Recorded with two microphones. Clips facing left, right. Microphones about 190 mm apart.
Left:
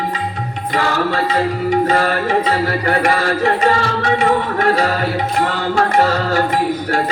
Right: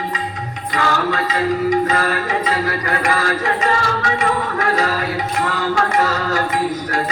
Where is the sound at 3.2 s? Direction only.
30° left (ahead or behind).